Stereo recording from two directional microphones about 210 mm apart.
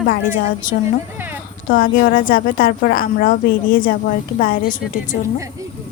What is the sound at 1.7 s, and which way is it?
Speech, 40° left (ahead or behind).